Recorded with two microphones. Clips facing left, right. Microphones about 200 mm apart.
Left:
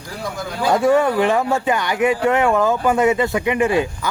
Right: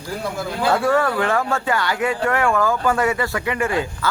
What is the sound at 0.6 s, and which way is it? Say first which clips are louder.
Speech: left 3 dB; 15° left (ahead or behind).